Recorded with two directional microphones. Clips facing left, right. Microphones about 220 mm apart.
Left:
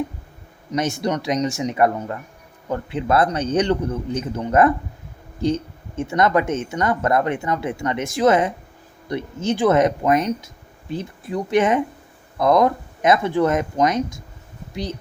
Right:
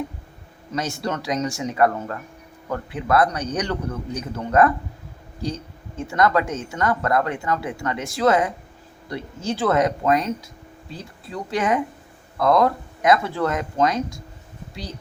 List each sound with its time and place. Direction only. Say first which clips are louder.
0.7 s speech: left 4 dB; 20° left (ahead or behind)